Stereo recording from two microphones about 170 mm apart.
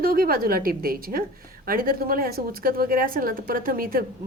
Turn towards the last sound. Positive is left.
turn(degrees=-60)  # may be behind; listen again after turning